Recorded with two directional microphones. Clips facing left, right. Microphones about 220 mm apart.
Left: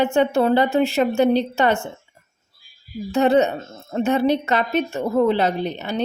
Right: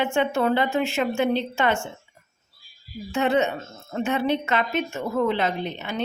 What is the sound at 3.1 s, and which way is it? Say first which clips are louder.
A woman's voice: left 5 dB; 35° left (ahead or behind).